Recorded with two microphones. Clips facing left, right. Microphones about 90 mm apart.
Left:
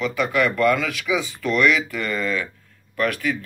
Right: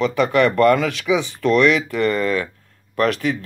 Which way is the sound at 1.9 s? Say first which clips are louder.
Right 6 dB; 40° right (ahead or behind).